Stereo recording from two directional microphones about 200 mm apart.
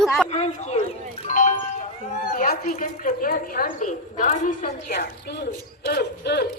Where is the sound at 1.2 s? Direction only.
40° left (ahead or behind).